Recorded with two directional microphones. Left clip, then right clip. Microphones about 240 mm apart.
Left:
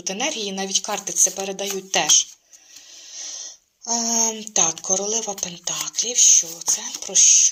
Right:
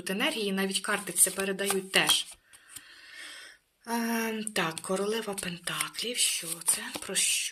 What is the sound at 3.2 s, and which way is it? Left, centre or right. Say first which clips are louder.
Wheeze: left 11 dB; centre.